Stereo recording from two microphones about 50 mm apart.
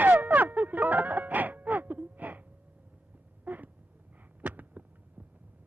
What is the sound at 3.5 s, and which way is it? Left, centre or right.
Cat, right.